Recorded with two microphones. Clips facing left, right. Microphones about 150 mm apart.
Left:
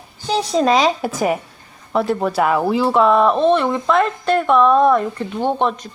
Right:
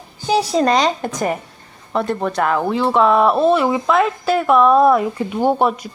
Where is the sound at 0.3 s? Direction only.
5° right (ahead or behind).